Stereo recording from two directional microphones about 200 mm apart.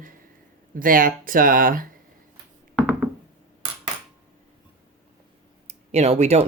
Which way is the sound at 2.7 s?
5° right (ahead or behind).